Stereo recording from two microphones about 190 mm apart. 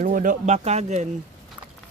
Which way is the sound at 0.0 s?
45° right (ahead or behind).